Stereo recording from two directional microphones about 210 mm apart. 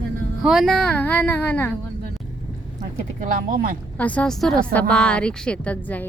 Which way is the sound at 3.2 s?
40° right (ahead or behind).